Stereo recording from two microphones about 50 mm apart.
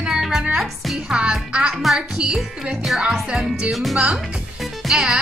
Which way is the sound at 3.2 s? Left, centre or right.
Centre.